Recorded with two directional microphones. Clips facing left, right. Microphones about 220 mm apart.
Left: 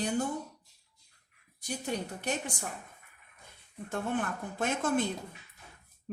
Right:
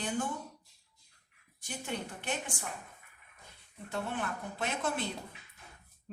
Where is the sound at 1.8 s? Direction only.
40° left (ahead or behind).